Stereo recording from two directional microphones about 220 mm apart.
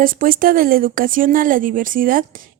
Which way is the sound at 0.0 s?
40° right (ahead or behind).